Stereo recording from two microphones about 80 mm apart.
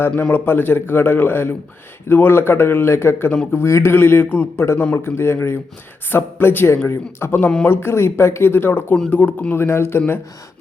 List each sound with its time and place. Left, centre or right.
0.2 s speech: left